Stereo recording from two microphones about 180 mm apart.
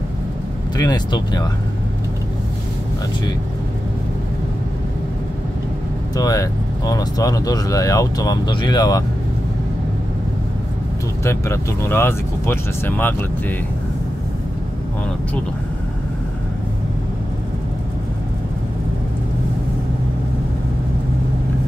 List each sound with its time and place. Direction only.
0.7 s speech: 25° left (ahead or behind)
6.1 s speech: 20° left (ahead or behind)
11.2 s speech: 15° left (ahead or behind)